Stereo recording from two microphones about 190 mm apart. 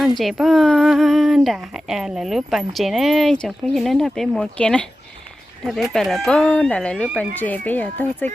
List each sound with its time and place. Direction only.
0.2 s speech: centre (ahead or behind)